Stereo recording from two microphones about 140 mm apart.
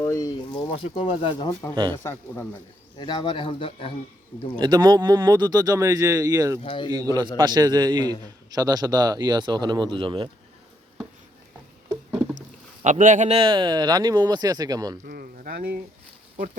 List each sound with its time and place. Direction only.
0.0 s speech: 25° left (ahead or behind)
1.7 s speech: 35° right (ahead or behind)
2.0 s speech: 15° left (ahead or behind)
3.0 s speech: 35° left (ahead or behind)
4.5 s speech: 30° right (ahead or behind)
6.6 s speech: 35° left (ahead or behind)
6.9 s speech: 25° right (ahead or behind)
12.8 s speech: 65° right (ahead or behind)
13.3 s speech: 35° right (ahead or behind)
15.0 s speech: 90° right